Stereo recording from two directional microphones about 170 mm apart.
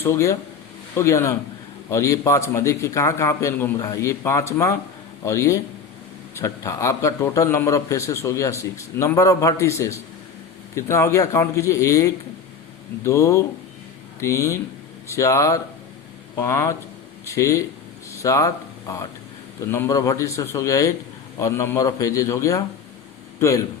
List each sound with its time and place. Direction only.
0.0 s a man's voice: 15° left (ahead or behind)